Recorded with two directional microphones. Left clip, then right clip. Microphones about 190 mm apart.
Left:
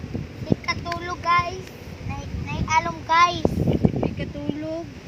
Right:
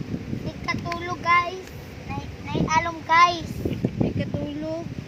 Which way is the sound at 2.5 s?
15° right (ahead or behind).